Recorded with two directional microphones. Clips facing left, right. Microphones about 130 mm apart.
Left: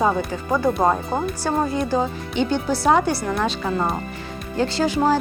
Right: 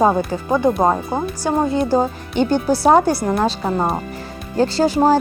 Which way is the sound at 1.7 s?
35° right (ahead or behind).